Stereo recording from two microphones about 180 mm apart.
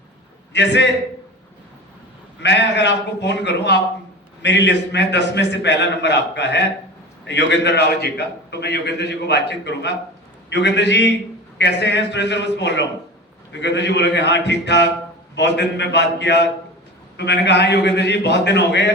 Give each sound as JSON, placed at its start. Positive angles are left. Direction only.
{"t": 0.5, "sound": "a man's voice", "side_deg": 80}
{"t": 2.4, "sound": "a man's voice", "side_deg": 75}